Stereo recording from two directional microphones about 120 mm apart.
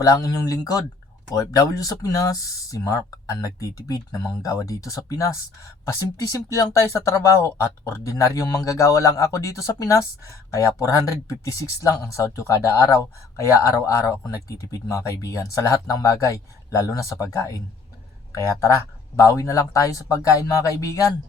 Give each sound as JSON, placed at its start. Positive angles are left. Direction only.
{"t": 0.0, "sound": "speech", "side_deg": 30}
{"t": 19.1, "sound": "speech", "side_deg": 25}